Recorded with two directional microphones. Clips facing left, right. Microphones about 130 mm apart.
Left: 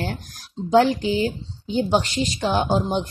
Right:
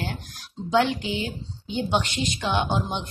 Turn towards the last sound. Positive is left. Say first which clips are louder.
# left 5 dB
turn(degrees=35)  # may be behind; listen again after turning